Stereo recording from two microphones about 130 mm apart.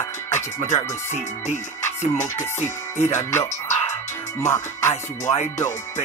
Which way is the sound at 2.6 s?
20° left (ahead or behind).